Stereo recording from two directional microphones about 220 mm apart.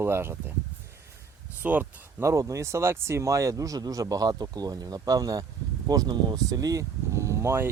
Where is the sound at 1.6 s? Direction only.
10° right (ahead or behind).